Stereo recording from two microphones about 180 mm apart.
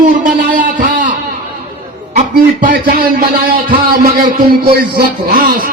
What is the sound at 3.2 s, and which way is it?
A man's voice, 55° right (ahead or behind).